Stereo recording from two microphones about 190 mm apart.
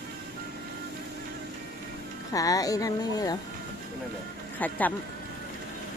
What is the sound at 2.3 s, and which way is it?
Speech, 20° left (ahead or behind).